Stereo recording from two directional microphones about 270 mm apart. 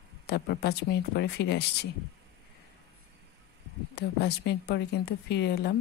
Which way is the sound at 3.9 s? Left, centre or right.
Left.